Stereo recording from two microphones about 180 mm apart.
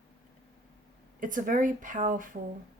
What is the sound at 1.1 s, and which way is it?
Speech, 50° right (ahead or behind).